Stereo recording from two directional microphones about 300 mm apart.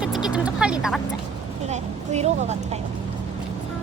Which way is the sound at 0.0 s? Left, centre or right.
Centre.